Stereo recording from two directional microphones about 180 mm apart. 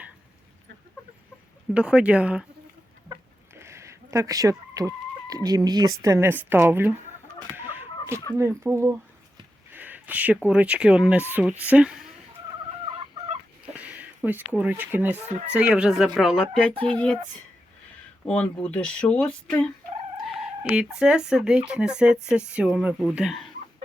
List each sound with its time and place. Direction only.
1.7 s speech: 5° right (ahead or behind)
7.3 s chicken: 15° right (ahead or behind)
8.4 s speech: 15° right (ahead or behind)
13.7 s speech: 10° right (ahead or behind)
16.7 s speech: 30° right (ahead or behind)
18.3 s speech: 5° left (ahead or behind)
20.7 s speech: 5° right (ahead or behind)